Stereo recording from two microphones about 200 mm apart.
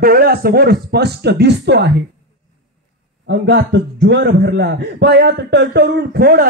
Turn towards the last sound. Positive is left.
turn(degrees=-50)  # may be behind; listen again after turning